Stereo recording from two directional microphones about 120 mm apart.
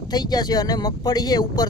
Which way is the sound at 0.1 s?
35° left (ahead or behind).